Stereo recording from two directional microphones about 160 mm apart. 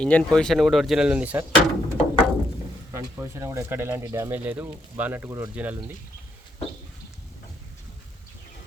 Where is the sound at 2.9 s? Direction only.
20° right (ahead or behind).